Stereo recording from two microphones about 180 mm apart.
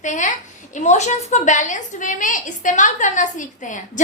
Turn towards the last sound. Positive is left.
turn(degrees=45)  # may be behind; listen again after turning